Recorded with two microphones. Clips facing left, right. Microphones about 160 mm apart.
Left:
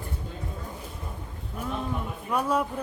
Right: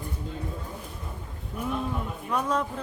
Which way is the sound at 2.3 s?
10° left (ahead or behind).